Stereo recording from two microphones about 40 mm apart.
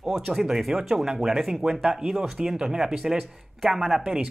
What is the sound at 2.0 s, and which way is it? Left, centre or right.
Speech, centre.